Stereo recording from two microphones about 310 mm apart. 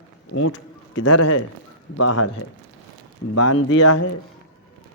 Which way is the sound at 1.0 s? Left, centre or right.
Left.